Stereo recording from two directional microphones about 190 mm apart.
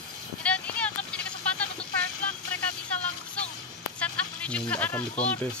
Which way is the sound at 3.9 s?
5° left (ahead or behind).